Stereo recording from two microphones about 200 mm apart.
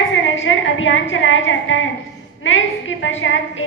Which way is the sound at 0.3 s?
75° left (ahead or behind).